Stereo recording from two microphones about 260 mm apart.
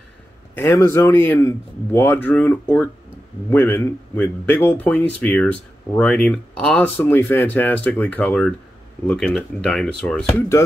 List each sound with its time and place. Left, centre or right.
0.7 s speech: centre